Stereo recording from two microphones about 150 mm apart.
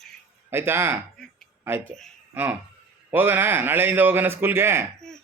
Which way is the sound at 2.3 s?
10° right (ahead or behind).